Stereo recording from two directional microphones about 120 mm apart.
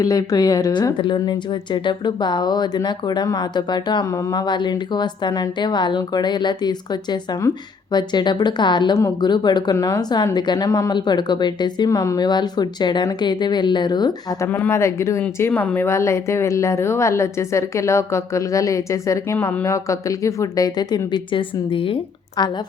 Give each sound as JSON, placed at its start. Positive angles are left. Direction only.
{"t": 0.0, "sound": "speech", "side_deg": 30}
{"t": 9.0, "sound": "a woman's voice", "side_deg": 25}
{"t": 14.5, "sound": "a woman's voice", "side_deg": 20}